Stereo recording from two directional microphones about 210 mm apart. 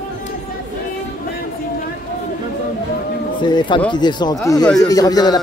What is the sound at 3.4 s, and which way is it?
A man's voice, 20° left (ahead or behind).